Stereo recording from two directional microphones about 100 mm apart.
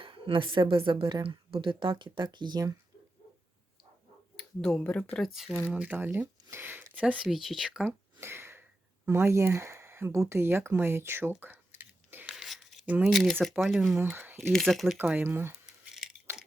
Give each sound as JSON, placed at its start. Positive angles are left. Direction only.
{"t": 0.0, "sound": "a woman's voice", "side_deg": -60}
{"t": 4.4, "sound": "speech", "side_deg": 5}
{"t": 5.1, "sound": "speech", "side_deg": 0}
{"t": 5.6, "sound": "speech", "side_deg": -15}
{"t": 7.2, "sound": "speech", "side_deg": -5}
{"t": 7.9, "sound": "a sound", "side_deg": -25}
{"t": 9.0, "sound": "speech", "side_deg": -25}
{"t": 12.3, "sound": "a sound", "side_deg": 0}
{"t": 12.8, "sound": "speech", "side_deg": -15}
{"t": 13.1, "sound": "speech", "side_deg": 0}
{"t": 14.0, "sound": "speech", "side_deg": -20}
{"t": 14.3, "sound": "speech", "side_deg": 5}
{"t": 14.9, "sound": "speech", "side_deg": -20}